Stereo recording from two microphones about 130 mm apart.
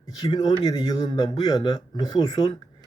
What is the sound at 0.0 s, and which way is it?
A man's voice, 35° left (ahead or behind).